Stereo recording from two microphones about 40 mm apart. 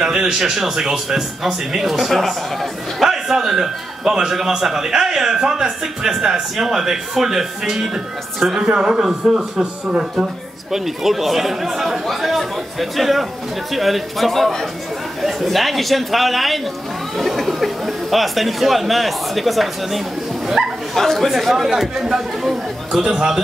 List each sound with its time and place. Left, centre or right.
0.0 s speech: centre
20.4 s bow-wow: centre
20.9 s speech: centre
21.3 s speech: centre